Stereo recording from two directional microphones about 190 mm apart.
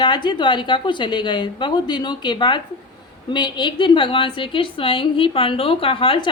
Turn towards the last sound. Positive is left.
turn(degrees=25)  # may be behind; listen again after turning